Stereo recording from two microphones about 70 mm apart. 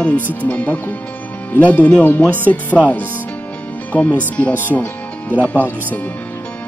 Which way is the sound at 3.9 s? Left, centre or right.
Centre.